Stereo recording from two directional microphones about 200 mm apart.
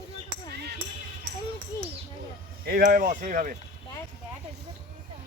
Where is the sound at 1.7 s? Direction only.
15° left (ahead or behind).